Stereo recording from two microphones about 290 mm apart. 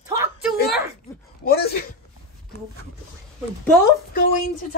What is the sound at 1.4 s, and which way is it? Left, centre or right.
Speech, left.